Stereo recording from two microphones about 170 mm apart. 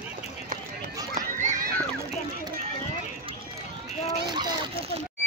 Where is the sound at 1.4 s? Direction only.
45° right (ahead or behind).